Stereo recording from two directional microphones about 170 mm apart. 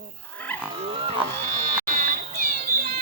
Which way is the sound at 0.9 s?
30° right (ahead or behind).